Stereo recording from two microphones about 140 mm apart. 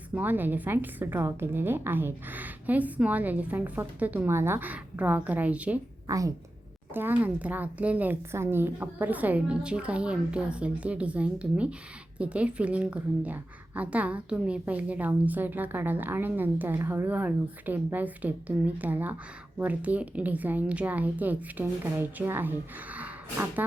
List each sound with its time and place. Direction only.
0.1 s a woman's voice: 15° right (ahead or behind)
6.1 s a woman's voice: 25° right (ahead or behind)
6.9 s a woman's voice: 15° right (ahead or behind)